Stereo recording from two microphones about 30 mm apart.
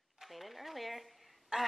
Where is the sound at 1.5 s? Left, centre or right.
Right.